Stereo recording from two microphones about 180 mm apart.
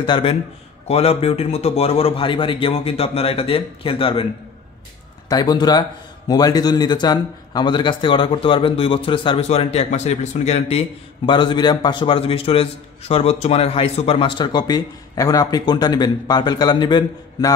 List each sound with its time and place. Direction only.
0.0 s a man's voice: 30° left (ahead or behind)
5.3 s a man's voice: 20° left (ahead or behind)